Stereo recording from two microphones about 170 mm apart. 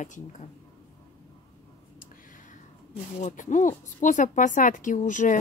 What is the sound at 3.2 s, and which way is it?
A woman's voice, 45° left (ahead or behind).